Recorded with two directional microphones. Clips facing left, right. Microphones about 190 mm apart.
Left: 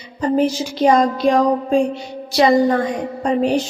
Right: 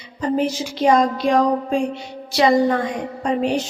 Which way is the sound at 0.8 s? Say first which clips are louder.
Left 2 dB; 35° left (ahead or behind).